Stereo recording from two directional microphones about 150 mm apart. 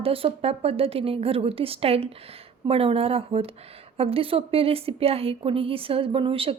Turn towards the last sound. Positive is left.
turn(degrees=-35)  # may be behind; listen again after turning